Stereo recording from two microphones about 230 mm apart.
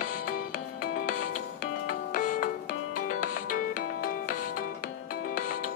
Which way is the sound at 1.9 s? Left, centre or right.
Left.